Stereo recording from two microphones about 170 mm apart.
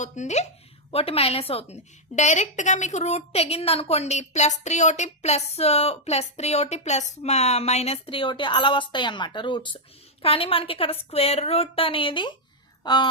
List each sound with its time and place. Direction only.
0.0 s speech: 45° left (ahead or behind); by 13.1 s 25° left (ahead or behind)